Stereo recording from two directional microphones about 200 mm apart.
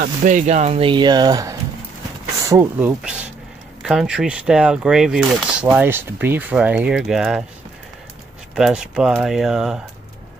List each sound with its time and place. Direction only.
0.0 s speech: 40° right (ahead or behind); by 7.4 s centre (ahead or behind)
8.5 s speech: 5° right (ahead or behind)